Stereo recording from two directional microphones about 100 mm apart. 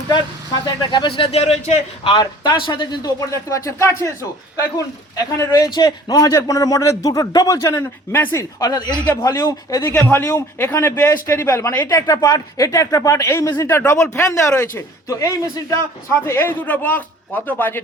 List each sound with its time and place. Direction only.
0.6 s speech: 50° left (ahead or behind); by 2.1 s 90° left
2.1 s speech: 50° left (ahead or behind)
3.2 s a man's voice: 35° left (ahead or behind)
5.4 s a man's voice: 35° left (ahead or behind)
16.2 s a man's voice: 25° left (ahead or behind)